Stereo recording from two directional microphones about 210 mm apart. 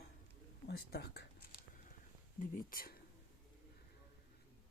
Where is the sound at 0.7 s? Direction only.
50° left (ahead or behind).